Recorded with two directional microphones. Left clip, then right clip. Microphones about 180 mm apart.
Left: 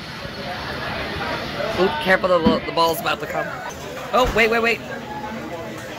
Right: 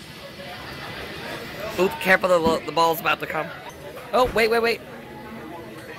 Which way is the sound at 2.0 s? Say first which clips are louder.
Even; 25° right (ahead or behind).